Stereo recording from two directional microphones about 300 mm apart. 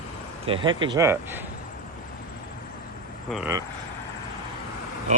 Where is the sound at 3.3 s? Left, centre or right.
Centre.